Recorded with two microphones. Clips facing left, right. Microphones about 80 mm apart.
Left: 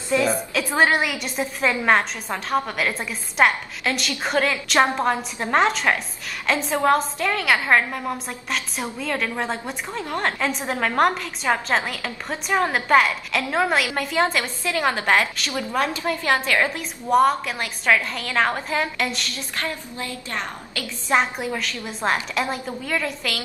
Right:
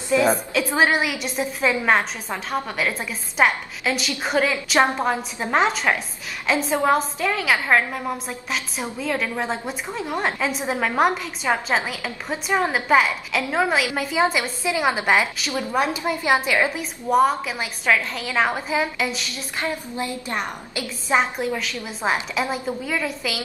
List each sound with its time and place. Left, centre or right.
0.1 s a woman's voice: centre
19.6 s a woman's voice: centre
21.1 s a woman's voice: centre